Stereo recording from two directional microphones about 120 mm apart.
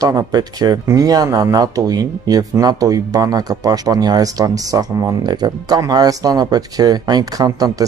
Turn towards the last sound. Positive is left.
turn(degrees=-30)  # may be behind; listen again after turning